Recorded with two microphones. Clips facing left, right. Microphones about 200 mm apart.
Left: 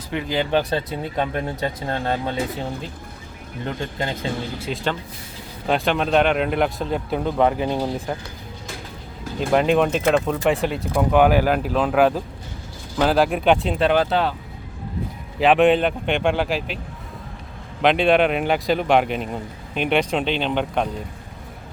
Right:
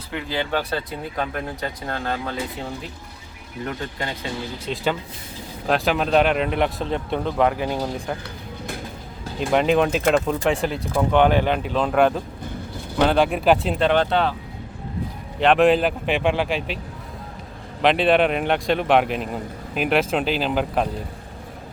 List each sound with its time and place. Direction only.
0.1 s speech: 20° left (ahead or behind)
4.6 s a man's voice: centre (ahead or behind)
9.5 s a man's voice: centre (ahead or behind)
15.4 s a man's voice: centre (ahead or behind)
17.8 s a man's voice: centre (ahead or behind)